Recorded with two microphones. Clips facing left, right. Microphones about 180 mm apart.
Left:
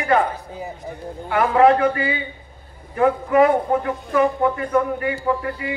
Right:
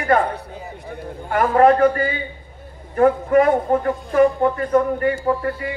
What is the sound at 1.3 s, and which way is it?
A woman's voice, 45° right (ahead or behind).